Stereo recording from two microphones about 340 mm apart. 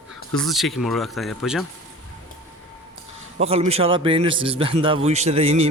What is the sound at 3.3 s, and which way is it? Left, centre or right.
A man's voice, centre.